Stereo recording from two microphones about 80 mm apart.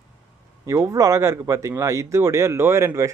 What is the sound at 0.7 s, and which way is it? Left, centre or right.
Speech, right.